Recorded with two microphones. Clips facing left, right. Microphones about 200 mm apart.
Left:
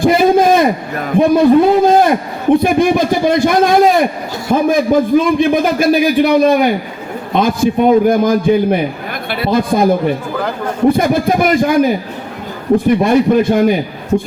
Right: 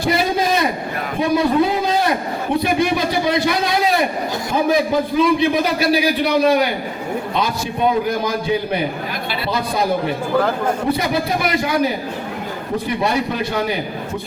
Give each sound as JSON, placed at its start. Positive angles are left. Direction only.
{"t": 0.0, "sound": "a sound", "side_deg": 50}
{"t": 1.2, "sound": "a man's voice", "side_deg": 50}
{"t": 4.5, "sound": "a sound", "side_deg": 55}
{"t": 5.2, "sound": "a man's voice", "side_deg": 50}
{"t": 10.8, "sound": "a man's voice", "side_deg": 50}
{"t": 12.7, "sound": "a man's voice", "side_deg": 50}